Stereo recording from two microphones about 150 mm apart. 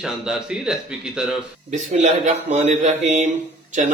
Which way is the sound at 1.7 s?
55° right (ahead or behind).